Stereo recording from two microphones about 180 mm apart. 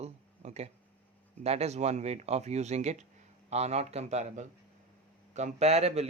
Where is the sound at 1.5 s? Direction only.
35° right (ahead or behind).